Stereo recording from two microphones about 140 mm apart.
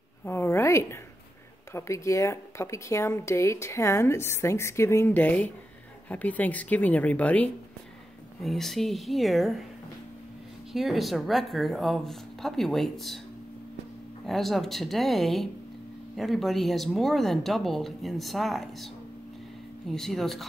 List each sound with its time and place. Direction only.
0.2 s a sound: 15° left (ahead or behind)
1.7 s speech: 20° left (ahead or behind); by 9.7 s centre (ahead or behind)
10.7 s speech: centre (ahead or behind)
14.2 s speech: centre (ahead or behind)
19.9 s speech: centre (ahead or behind)